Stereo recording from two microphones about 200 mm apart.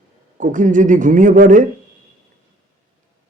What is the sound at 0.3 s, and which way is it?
A man's voice, 40° right (ahead or behind).